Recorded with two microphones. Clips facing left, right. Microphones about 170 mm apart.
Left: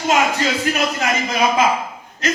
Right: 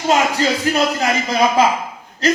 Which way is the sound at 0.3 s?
35° right (ahead or behind).